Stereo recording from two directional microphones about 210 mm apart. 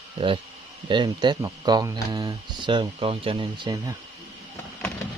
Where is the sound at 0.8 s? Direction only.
20° right (ahead or behind).